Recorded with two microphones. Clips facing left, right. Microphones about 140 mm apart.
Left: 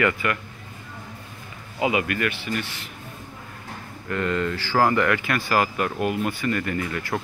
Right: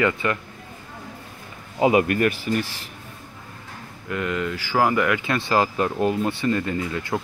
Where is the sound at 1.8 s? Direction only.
40° right (ahead or behind).